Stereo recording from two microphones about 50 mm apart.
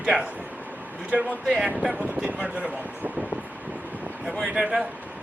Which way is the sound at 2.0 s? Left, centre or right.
Right.